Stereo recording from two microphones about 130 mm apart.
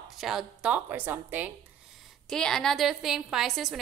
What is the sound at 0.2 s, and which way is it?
A woman's voice, 5° right (ahead or behind).